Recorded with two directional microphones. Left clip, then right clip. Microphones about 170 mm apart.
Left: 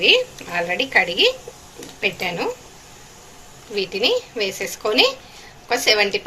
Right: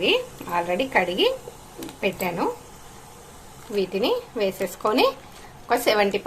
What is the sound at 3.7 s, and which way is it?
A woman's voice, 55° right (ahead or behind).